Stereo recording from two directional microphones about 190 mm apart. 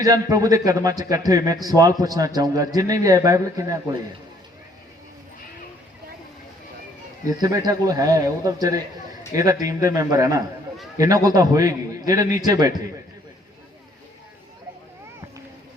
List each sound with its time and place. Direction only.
0.0 s a man's voice: 20° right (ahead or behind)
7.4 s a man's voice: 20° right (ahead or behind)